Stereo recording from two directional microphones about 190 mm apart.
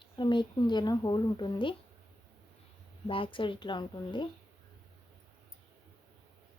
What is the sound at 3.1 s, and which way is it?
Speech, 25° left (ahead or behind).